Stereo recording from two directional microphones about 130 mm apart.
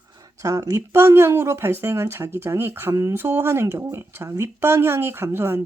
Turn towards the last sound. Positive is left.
turn(degrees=-20)  # may be behind; listen again after turning